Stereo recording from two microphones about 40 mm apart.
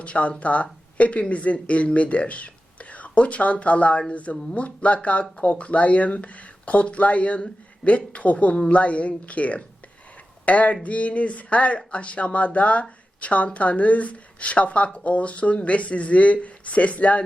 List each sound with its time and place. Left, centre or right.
0.0 s speech: left